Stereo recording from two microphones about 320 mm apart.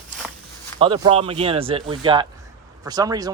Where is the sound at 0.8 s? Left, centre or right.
Centre.